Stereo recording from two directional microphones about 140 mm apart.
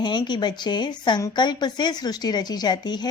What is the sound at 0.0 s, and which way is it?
Speech, 30° left (ahead or behind).